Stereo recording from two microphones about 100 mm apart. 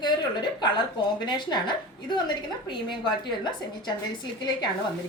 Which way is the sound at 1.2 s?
50° left (ahead or behind).